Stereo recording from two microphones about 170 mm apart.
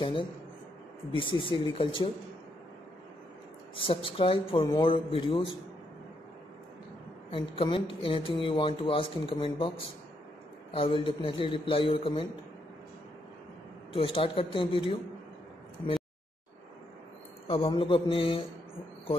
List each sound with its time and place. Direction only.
0.0 s speech: 30° left (ahead or behind)
3.7 s speech: 30° left (ahead or behind)
7.2 s speech: 30° left (ahead or behind)
13.9 s speech: 30° left (ahead or behind)
17.5 s speech: 30° left (ahead or behind)